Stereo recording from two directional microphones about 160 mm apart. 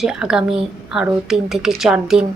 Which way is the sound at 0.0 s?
5° right (ahead or behind).